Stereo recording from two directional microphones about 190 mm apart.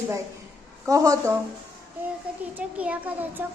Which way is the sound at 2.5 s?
5° right (ahead or behind).